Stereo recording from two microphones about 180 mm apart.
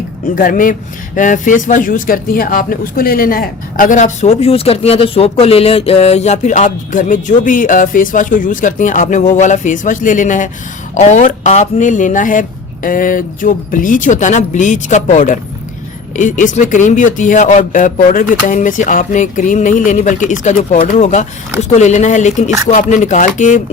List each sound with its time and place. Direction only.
0.3 s speech: 50° left (ahead or behind)